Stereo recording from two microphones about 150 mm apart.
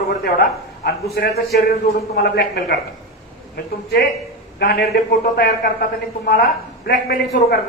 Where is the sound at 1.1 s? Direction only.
90° left.